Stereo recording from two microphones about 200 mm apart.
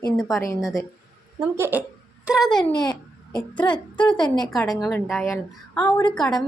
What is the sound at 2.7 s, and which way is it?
A child's voice, 20° left (ahead or behind).